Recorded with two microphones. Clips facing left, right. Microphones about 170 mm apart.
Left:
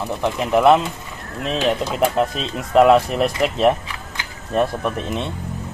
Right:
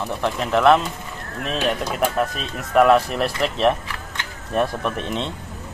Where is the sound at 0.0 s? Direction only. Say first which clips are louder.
Left 2 dB; 15° left (ahead or behind).